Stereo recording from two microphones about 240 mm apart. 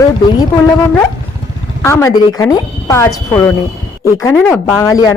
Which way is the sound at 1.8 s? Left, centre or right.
Centre.